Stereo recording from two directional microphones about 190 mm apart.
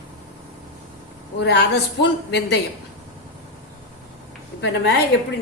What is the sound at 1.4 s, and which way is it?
Speech, 65° left (ahead or behind).